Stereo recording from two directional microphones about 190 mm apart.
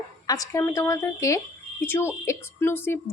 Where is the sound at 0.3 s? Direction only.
15° left (ahead or behind).